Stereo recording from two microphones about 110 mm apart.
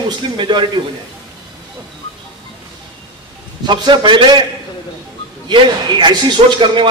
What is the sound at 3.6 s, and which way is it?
Speech, 45° right (ahead or behind).